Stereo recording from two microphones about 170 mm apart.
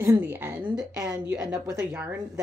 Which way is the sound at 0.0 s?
10° right (ahead or behind).